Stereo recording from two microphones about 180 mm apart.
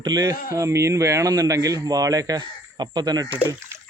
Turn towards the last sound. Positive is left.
turn(degrees=-10)  # may be behind; listen again after turning